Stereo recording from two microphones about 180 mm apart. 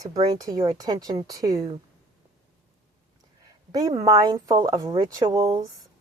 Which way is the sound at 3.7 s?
20° right (ahead or behind).